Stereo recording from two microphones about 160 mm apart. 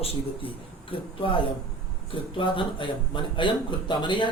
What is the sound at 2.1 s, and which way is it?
Speech, 30° left (ahead or behind).